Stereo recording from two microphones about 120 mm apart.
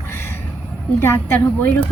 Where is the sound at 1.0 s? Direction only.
20° left (ahead or behind).